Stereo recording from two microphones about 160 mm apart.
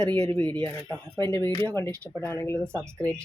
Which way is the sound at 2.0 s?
15° left (ahead or behind).